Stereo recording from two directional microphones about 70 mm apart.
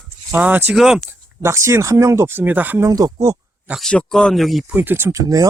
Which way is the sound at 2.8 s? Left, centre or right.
Right.